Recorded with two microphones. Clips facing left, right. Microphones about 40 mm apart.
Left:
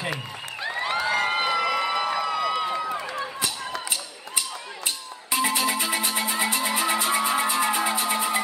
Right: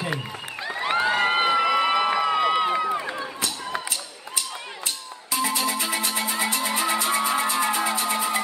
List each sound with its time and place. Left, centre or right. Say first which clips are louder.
0.8 s crowd: right 3 dB; right
2.0 s a sound: right 4 dB; centre
5.3 s music: left 1 dB; centre
5.8 s music: even; centre